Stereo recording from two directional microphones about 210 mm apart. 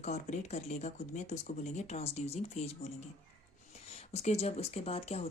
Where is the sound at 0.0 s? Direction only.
35° left (ahead or behind).